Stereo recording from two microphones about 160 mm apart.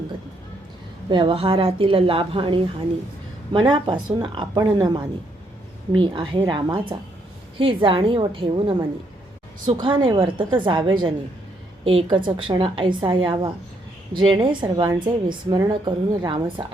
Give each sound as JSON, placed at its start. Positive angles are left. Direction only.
{"t": 1.1, "sound": "a woman's voice", "side_deg": -30}